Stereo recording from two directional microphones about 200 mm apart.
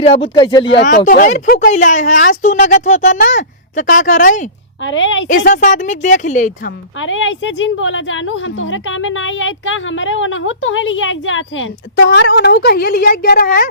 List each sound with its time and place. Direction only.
0.0 s speech: 30° left (ahead or behind)
0.9 s speech: 40° left (ahead or behind)
4.8 s a woman's voice: 70° left (ahead or behind)
5.5 s speech: 40° left (ahead or behind)
7.0 s a woman's voice: 70° left (ahead or behind)
12.0 s a woman's voice: 60° left (ahead or behind)